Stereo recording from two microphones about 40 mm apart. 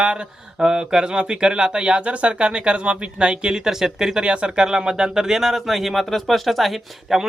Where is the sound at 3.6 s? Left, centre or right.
Centre.